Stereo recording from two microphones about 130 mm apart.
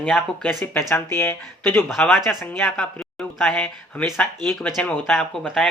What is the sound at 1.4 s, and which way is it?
Speech, 5° left (ahead or behind).